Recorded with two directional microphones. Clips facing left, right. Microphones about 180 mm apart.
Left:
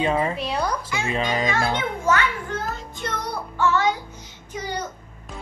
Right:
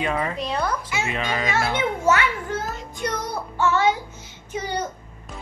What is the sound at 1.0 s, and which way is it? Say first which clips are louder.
Speech: left 5 dB; 30° left (ahead or behind).